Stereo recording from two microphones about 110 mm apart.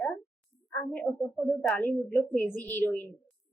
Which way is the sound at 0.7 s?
15° left (ahead or behind).